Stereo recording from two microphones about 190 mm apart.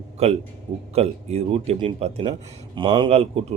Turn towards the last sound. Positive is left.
turn(degrees=-30)  # may be behind; listen again after turning